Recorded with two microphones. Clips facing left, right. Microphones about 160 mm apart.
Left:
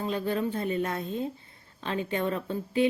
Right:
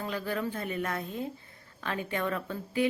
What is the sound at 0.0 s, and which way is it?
A woman's voice, 25° left (ahead or behind).